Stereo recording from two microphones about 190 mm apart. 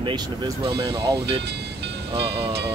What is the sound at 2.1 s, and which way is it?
Speech, 30° right (ahead or behind).